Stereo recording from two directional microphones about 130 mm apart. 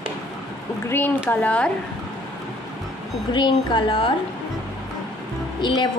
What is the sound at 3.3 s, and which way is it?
Speech, 35° left (ahead or behind).